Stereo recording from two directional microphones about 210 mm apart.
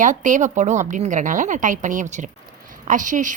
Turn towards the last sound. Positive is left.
turn(degrees=-35)  # may be behind; listen again after turning